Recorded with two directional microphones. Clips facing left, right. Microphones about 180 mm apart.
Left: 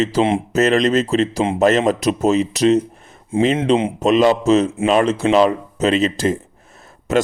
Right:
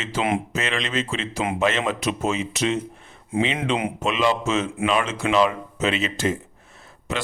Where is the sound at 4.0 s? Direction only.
40° left (ahead or behind).